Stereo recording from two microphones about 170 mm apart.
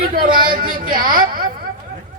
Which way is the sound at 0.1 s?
55° right (ahead or behind).